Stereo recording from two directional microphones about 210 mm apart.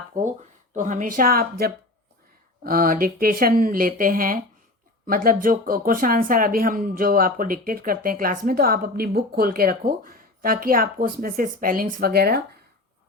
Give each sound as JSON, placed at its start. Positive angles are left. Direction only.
{"t": 0.1, "sound": "speech", "side_deg": -40}